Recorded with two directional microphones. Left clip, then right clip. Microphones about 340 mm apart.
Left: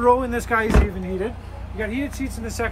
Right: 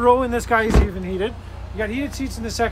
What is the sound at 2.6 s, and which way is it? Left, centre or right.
Speech, right.